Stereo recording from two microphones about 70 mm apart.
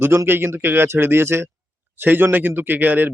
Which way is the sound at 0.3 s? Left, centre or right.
Right.